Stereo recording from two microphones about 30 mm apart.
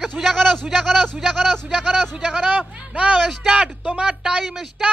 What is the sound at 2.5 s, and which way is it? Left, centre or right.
Speech, right.